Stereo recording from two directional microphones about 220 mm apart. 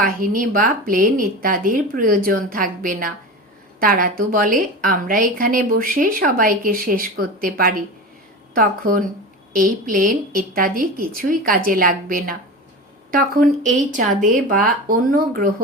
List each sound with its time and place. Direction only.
0.0 s a woman's voice: 40° right (ahead or behind)